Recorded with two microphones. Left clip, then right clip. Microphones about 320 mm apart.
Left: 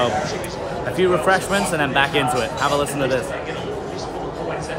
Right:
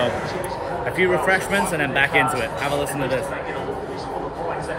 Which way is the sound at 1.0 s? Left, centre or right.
Centre.